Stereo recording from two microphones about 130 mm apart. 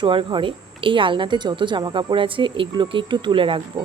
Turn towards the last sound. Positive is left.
turn(degrees=-40)  # may be behind; listen again after turning